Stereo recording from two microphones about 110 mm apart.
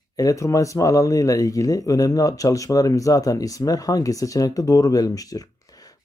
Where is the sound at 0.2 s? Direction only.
30° left (ahead or behind).